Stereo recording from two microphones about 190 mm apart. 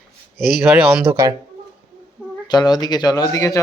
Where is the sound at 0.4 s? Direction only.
5° right (ahead or behind).